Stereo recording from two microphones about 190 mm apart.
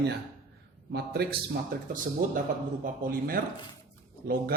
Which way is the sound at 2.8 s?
45° right (ahead or behind).